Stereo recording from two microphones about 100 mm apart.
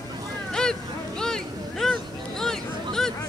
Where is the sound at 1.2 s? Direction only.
5° left (ahead or behind).